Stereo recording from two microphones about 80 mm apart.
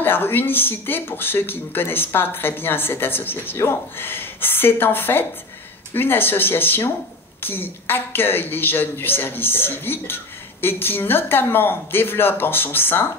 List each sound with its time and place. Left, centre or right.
0.0 s a woman's voice: left